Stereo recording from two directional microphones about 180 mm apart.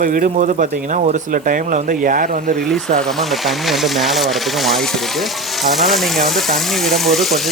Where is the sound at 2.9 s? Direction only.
Centre (ahead or behind).